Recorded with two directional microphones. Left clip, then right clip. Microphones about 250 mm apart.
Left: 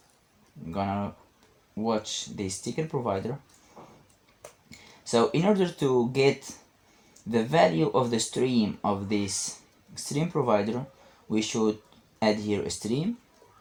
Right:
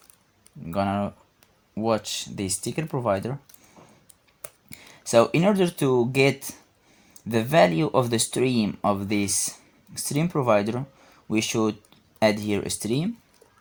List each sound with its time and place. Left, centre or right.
0.7 s speech: right
4.7 s speech: right